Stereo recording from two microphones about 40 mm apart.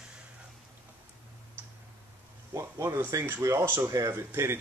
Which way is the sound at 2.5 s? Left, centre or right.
Right.